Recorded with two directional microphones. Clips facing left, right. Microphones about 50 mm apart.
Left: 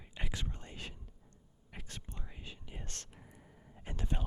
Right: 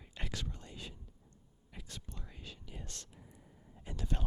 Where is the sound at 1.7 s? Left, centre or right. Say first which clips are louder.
Left 1 dB; left.